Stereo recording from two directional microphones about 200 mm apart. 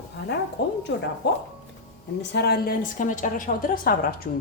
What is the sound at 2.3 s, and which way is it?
A woman's voice, 55° left (ahead or behind).